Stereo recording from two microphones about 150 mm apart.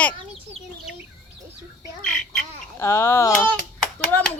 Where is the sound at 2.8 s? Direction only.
15° left (ahead or behind).